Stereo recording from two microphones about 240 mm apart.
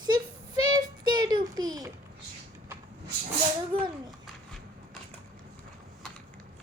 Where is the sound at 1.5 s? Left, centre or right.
Centre.